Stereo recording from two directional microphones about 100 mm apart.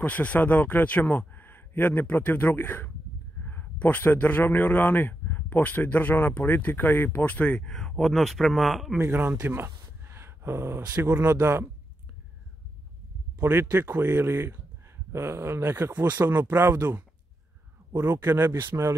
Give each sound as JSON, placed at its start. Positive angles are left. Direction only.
{"t": 0.0, "sound": "a man's voice", "side_deg": 15}
{"t": 9.0, "sound": "speech", "side_deg": -20}
{"t": 13.4, "sound": "speech", "side_deg": -25}